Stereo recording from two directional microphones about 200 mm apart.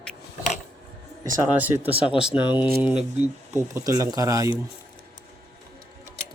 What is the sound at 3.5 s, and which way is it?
Speech, 15° right (ahead or behind).